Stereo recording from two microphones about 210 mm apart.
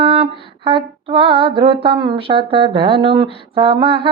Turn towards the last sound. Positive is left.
turn(degrees=-25)  # may be behind; listen again after turning